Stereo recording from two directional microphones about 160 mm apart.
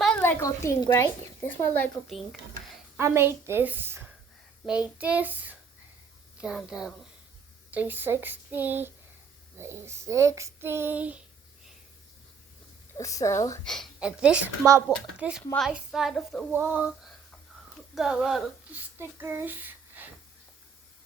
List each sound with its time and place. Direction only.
0.2 s a woman's voice: 15° left (ahead or behind)
3.0 s child singing: 15° right (ahead or behind)
6.3 s a woman's voice: 5° right (ahead or behind)
7.7 s child singing: 10° right (ahead or behind)
13.0 s a woman's voice: 20° left (ahead or behind)
13.7 s a woman's voice: centre (ahead or behind)
14.6 s speech: 20° right (ahead or behind)
14.8 s a woman's voice: 5° right (ahead or behind)
16.5 s child singing: 10° right (ahead or behind)
17.9 s a child's voice: 5° right (ahead or behind)